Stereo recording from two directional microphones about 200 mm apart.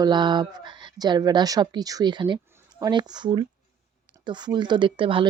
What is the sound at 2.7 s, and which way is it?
Speech, 20° right (ahead or behind).